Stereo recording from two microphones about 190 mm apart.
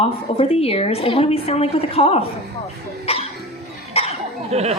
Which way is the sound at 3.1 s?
30° left (ahead or behind).